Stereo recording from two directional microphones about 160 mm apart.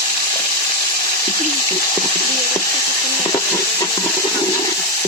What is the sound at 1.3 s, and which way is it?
Speech, 20° left (ahead or behind).